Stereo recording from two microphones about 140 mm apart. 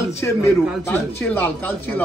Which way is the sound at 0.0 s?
20° left (ahead or behind).